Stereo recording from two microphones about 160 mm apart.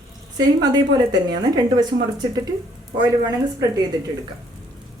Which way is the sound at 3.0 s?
25° right (ahead or behind).